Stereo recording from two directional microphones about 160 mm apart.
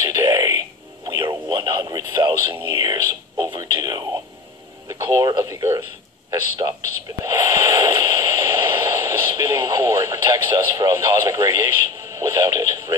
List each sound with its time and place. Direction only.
0.1 s music: 20° right (ahead or behind)
1.3 s radio: 25° right (ahead or behind)
6.6 s a sound: 25° right (ahead or behind)